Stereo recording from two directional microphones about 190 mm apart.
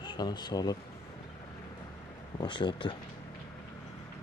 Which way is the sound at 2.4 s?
25° left (ahead or behind).